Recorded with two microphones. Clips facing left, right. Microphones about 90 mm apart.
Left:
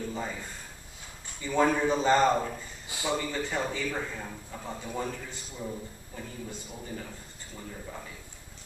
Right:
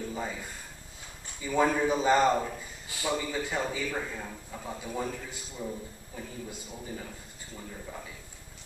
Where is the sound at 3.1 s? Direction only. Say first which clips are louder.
Left 1 dB; 5° right (ahead or behind).